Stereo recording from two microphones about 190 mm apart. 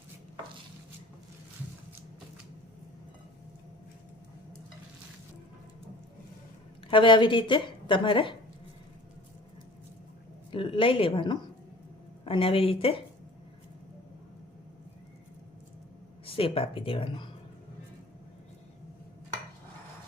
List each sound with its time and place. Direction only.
6.8 s speech: 25° left (ahead or behind)
10.5 s speech: 25° left (ahead or behind)
16.2 s speech: 30° left (ahead or behind)